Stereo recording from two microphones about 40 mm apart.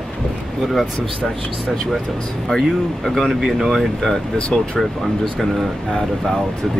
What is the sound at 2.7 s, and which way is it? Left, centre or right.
Speech, centre.